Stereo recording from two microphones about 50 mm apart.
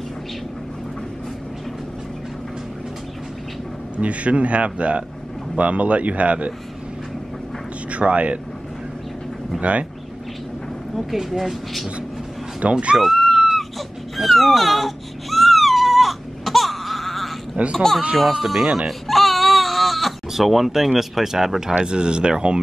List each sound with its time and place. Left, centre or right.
4.0 s a man's voice: right
7.9 s speech: right
9.6 s a man's voice: right
11.0 s speech: centre
12.9 s wail: centre
17.7 s speech: centre
18.9 s baby cry: centre
21.7 s a man's voice: centre